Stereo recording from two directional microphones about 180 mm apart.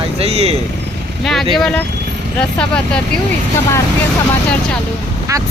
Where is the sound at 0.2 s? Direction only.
35° right (ahead or behind).